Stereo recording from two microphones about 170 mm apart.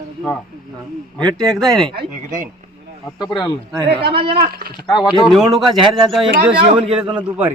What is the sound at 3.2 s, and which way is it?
Speech, 25° left (ahead or behind).